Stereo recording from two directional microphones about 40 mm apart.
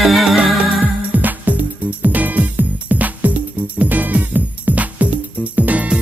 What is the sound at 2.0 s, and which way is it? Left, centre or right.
Music, right.